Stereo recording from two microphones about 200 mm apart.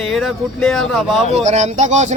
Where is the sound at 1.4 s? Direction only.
35° right (ahead or behind).